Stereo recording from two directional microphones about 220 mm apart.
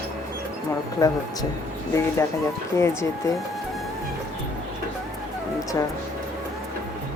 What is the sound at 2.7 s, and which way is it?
Speech, 10° left (ahead or behind).